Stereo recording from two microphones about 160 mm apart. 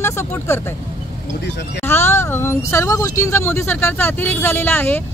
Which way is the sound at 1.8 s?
15° left (ahead or behind).